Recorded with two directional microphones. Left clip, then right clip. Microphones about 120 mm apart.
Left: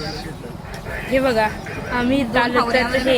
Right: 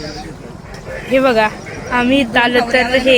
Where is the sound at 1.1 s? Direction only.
15° right (ahead or behind).